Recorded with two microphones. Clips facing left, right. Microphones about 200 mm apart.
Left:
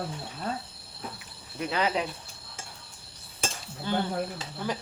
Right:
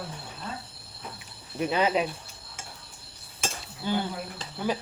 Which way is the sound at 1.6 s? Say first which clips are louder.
Right 3 dB; 20° right (ahead or behind).